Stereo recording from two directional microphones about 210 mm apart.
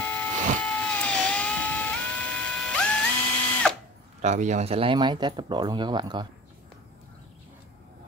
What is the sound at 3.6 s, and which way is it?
Drill, 5° left (ahead or behind).